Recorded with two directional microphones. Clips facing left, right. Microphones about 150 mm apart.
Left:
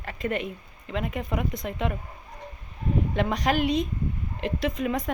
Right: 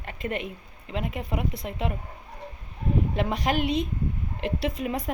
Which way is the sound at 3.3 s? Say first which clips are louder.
Left 2 dB; 35° left (ahead or behind).